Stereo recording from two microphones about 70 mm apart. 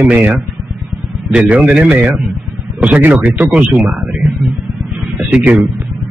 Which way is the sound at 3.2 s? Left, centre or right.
Right.